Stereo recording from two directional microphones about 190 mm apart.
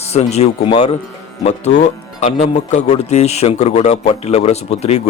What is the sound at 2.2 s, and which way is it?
Speech, 35° left (ahead or behind).